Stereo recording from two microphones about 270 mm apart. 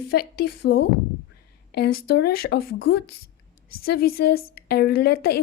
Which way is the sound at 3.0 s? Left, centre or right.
Left.